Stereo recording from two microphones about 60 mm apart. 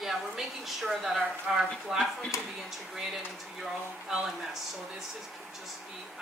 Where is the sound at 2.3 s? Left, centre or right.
Left.